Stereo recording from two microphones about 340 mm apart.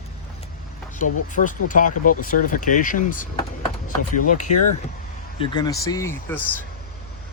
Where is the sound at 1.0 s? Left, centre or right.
Left.